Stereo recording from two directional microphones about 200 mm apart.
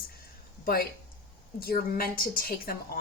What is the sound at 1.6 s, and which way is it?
Speech, 50° left (ahead or behind).